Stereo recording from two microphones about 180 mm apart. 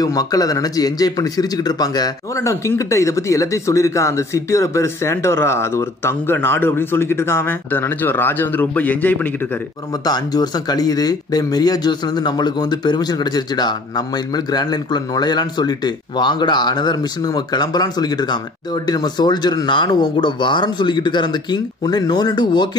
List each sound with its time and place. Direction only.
0.0 s a man's voice: 20° left (ahead or behind)
10.0 s speech: 20° left (ahead or behind)